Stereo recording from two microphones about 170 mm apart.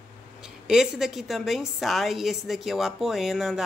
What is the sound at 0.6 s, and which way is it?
A woman's voice, 5° right (ahead or behind).